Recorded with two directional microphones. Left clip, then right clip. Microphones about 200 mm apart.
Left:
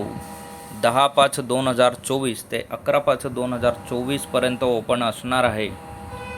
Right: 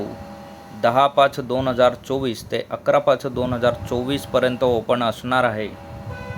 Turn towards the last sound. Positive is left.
turn(degrees=0)  # may be behind; listen again after turning